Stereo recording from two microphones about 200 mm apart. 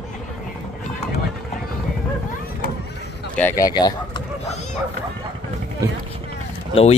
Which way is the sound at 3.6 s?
20° left (ahead or behind).